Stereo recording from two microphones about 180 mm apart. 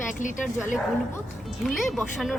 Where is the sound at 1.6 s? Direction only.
Centre (ahead or behind).